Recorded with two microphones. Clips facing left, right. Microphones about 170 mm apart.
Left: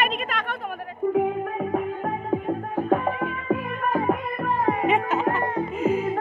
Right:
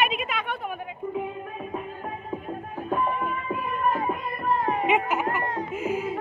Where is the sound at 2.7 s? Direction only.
80° left.